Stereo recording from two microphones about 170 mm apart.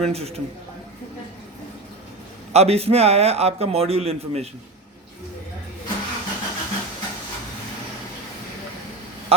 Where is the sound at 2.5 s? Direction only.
40° right (ahead or behind).